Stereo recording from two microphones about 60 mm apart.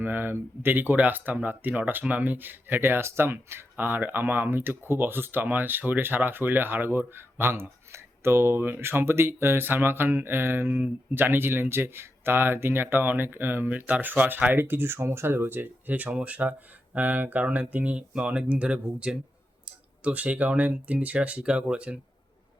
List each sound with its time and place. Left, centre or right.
0.0 s speech: right; by 21.9 s centre